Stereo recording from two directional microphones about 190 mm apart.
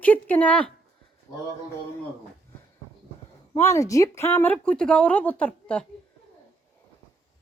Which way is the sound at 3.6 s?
15° left (ahead or behind).